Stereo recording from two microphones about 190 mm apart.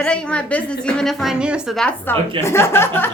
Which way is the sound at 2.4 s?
15° left (ahead or behind).